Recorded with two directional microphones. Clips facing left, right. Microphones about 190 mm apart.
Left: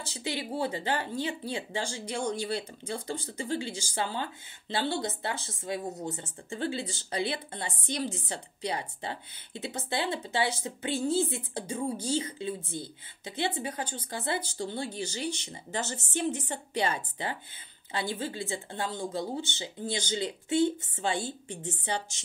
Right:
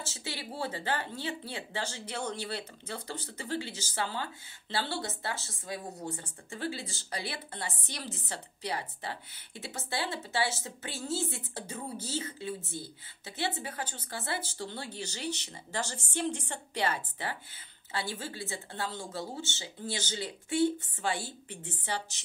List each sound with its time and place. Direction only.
0.0 s speech: 15° left (ahead or behind)